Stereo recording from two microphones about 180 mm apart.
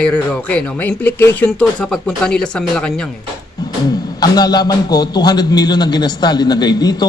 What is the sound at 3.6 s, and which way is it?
Music, 20° left (ahead or behind).